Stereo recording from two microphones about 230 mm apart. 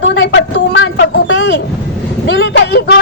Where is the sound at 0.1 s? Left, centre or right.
Left.